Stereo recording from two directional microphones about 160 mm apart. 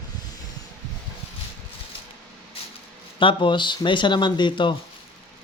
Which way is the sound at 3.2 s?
30° left (ahead or behind).